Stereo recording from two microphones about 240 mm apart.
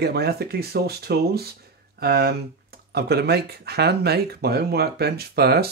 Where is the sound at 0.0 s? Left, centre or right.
Right.